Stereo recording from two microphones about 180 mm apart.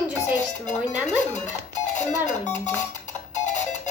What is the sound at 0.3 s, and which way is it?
Speech, 40° left (ahead or behind).